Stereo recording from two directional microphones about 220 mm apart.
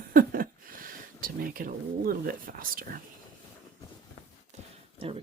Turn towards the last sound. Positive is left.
turn(degrees=-25)  # may be behind; listen again after turning